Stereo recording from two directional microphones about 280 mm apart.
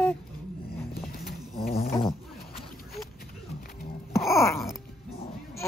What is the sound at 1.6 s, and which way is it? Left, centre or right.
Insect, left.